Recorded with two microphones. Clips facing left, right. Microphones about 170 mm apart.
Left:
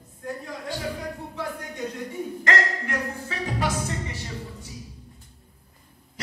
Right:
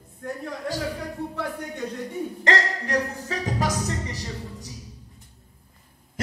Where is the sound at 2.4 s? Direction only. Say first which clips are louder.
Right 1 dB; 35° right (ahead or behind).